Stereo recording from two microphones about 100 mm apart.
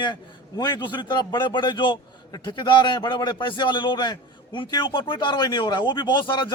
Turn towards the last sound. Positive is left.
turn(degrees=55)  # may be behind; listen again after turning